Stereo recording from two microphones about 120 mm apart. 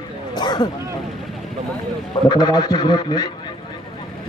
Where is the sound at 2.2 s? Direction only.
35° left (ahead or behind).